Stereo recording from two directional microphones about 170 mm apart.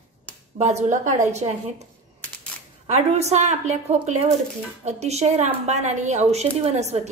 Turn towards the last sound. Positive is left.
turn(degrees=-40)  # may be behind; listen again after turning